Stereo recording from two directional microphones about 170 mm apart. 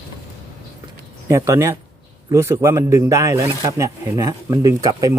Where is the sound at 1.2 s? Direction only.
15° right (ahead or behind).